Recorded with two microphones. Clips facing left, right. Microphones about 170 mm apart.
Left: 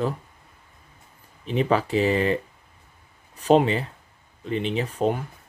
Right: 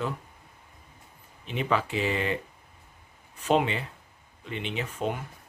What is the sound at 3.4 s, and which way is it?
Speech, 35° left (ahead or behind).